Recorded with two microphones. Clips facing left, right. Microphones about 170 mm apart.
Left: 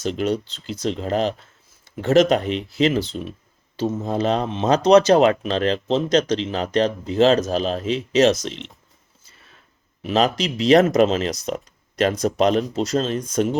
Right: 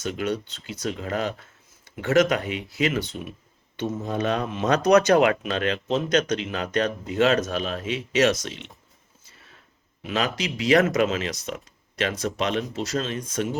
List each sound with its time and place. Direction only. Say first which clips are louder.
0.0 s speech: left 5 dB; 30° left (ahead or behind)
10.1 s speech: left 7 dB; 30° left (ahead or behind)